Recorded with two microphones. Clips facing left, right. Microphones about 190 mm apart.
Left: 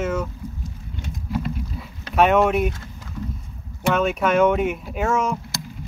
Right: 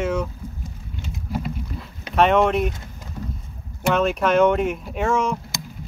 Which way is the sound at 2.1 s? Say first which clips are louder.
Even; 5° left (ahead or behind).